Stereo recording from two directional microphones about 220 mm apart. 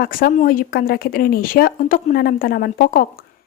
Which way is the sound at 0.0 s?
40° left (ahead or behind).